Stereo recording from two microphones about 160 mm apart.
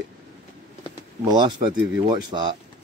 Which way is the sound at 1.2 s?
30° right (ahead or behind).